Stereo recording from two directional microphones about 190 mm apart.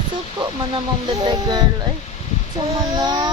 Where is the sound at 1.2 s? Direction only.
20° right (ahead or behind).